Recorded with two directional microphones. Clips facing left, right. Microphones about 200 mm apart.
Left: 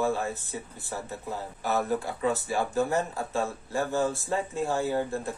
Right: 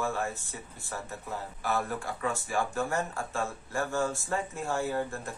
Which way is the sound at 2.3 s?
35° left (ahead or behind).